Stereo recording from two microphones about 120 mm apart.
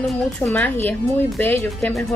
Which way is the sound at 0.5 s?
15° left (ahead or behind).